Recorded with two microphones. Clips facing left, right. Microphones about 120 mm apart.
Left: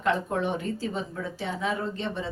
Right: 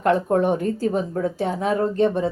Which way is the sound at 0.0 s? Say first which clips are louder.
Right 8 dB; 45° right (ahead or behind).